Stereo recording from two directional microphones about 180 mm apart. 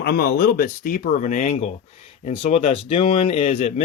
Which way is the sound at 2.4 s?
35° left (ahead or behind).